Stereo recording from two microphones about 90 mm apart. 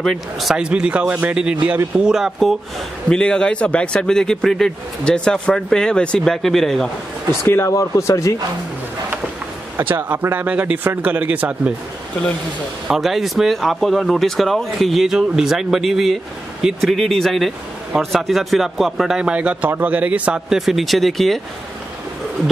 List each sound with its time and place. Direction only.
0.0 s a man's voice: centre (ahead or behind)
3.1 s a man's voice: 10° left (ahead or behind)
7.4 s speech: 30° left (ahead or behind)
9.8 s a man's voice: 20° right (ahead or behind)
12.8 s speech: centre (ahead or behind)